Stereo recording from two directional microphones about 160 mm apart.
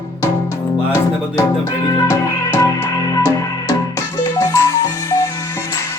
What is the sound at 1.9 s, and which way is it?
Music, 20° left (ahead or behind).